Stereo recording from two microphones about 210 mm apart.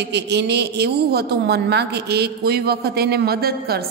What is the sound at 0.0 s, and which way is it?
A woman's voice, 55° right (ahead or behind).